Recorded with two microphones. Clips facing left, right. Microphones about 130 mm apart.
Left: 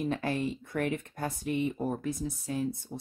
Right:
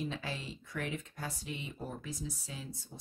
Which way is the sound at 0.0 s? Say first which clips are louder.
Left 9 dB; 55° left (ahead or behind).